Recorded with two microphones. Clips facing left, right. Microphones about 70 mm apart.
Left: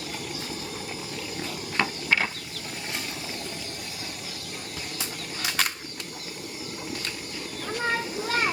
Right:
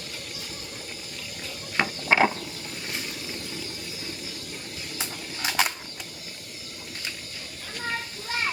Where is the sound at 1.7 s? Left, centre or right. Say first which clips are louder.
Right 4 dB; right.